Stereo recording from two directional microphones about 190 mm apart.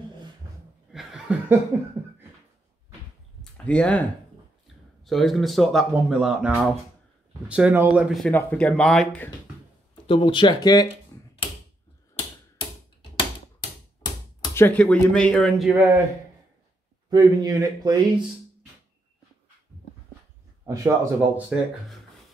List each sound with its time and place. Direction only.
0.9 s chuckle: 5° right (ahead or behind)
3.5 s speech: 5° left (ahead or behind)
5.0 s speech: centre (ahead or behind)
10.0 s speech: 25° left (ahead or behind)
14.4 s speech: 15° left (ahead or behind)
17.1 s speech: 20° right (ahead or behind)
20.6 s speech: 15° right (ahead or behind)